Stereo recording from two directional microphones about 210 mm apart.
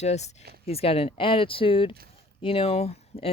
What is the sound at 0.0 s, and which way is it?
Speech, 30° left (ahead or behind).